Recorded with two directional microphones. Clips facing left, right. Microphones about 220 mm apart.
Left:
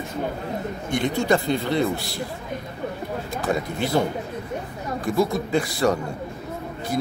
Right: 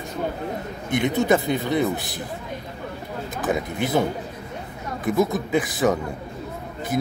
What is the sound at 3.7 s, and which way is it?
Speech, 20° right (ahead or behind).